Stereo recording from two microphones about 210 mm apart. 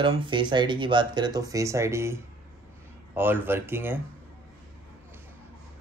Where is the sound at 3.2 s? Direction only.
10° right (ahead or behind).